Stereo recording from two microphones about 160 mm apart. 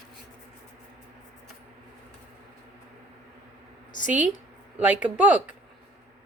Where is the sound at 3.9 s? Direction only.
55° left (ahead or behind).